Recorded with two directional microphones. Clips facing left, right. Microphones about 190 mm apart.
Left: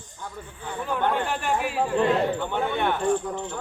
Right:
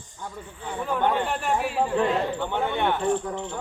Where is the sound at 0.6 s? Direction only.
Centre (ahead or behind).